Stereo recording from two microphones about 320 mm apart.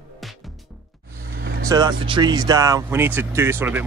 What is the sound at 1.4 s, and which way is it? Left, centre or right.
Vehicle, right.